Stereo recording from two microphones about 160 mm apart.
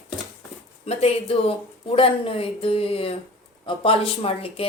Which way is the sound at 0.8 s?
40° left (ahead or behind).